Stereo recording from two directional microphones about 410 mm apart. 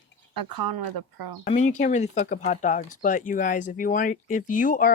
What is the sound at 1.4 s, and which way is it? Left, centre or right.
Speech, centre.